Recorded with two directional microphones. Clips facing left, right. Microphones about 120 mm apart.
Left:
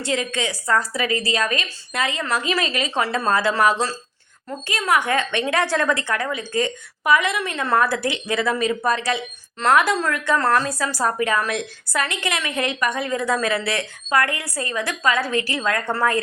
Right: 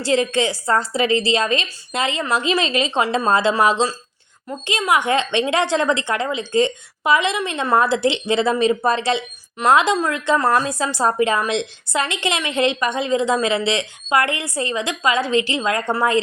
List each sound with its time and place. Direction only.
0.0 s speech: 30° right (ahead or behind)
9.6 s speech: 15° right (ahead or behind)